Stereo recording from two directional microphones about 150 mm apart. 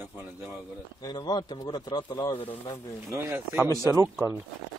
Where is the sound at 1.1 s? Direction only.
30° left (ahead or behind).